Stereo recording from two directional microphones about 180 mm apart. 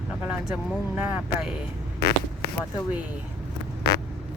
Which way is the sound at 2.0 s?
60° left (ahead or behind).